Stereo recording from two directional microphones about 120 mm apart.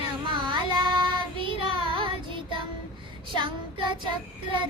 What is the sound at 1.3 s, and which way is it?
Child singing, 45° right (ahead or behind).